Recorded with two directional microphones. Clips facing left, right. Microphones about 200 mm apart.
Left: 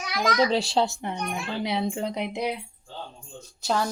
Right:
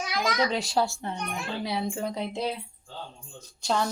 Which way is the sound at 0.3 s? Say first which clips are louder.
Left 4 dB; 30° left (ahead or behind).